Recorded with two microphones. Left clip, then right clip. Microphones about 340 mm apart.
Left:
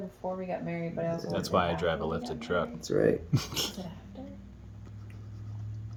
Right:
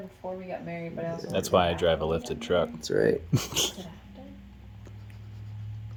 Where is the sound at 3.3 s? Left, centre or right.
Right.